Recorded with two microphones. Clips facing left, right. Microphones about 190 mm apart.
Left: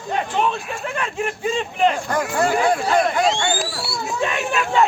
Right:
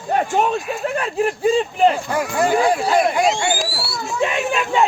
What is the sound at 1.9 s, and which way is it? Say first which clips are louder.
Speech: right 1 dB; 10° right (ahead or behind).